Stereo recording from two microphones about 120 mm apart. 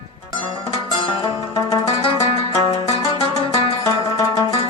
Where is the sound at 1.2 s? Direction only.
35° left (ahead or behind).